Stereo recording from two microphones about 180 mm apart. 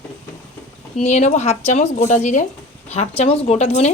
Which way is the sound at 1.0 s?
40° left (ahead or behind).